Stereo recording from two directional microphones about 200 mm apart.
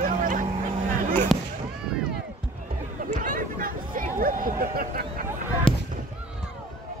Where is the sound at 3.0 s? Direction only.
40° right (ahead or behind).